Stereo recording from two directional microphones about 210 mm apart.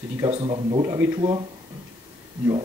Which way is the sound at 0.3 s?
25° right (ahead or behind).